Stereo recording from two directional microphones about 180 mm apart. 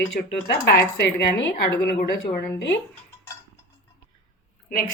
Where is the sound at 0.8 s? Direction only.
70° left (ahead or behind).